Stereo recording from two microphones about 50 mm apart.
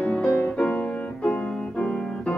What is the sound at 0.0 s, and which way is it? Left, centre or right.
Music, left.